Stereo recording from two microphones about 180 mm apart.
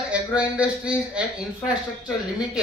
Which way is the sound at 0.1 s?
5° right (ahead or behind).